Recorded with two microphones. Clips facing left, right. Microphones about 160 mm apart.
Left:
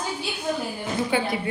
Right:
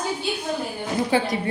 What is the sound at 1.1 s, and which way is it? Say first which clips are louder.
Speech: right 3 dB; 35° right (ahead or behind).